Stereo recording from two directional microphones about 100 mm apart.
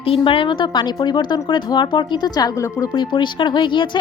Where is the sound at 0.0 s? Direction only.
65° left (ahead or behind).